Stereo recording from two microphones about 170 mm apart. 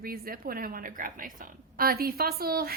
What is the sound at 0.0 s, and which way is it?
A woman's voice, 60° right (ahead or behind).